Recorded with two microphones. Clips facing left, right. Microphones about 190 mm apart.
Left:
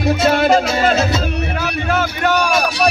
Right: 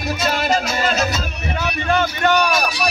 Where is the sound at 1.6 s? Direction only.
5° left (ahead or behind).